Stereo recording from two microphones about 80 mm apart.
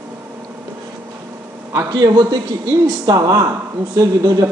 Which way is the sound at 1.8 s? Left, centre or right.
Right.